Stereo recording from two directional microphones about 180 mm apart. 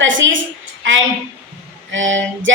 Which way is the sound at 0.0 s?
90° right.